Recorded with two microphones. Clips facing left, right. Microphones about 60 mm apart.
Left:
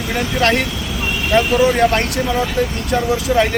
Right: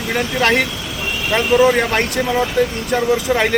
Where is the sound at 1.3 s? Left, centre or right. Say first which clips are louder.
Right 1 dB; centre.